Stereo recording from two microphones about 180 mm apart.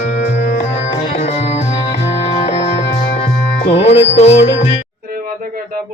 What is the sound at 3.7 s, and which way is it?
Music, 35° left (ahead or behind).